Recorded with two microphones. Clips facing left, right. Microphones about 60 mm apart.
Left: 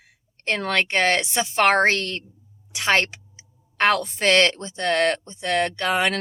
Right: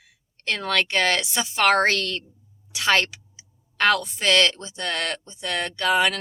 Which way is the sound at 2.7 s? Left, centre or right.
Left.